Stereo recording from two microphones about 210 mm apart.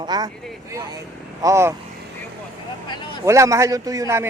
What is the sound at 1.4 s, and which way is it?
Speech, 15° right (ahead or behind).